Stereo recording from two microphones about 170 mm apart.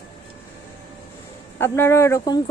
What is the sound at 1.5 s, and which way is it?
Speech, 15° left (ahead or behind).